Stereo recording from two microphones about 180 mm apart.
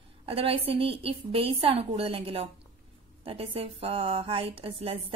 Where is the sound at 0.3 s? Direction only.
30° right (ahead or behind).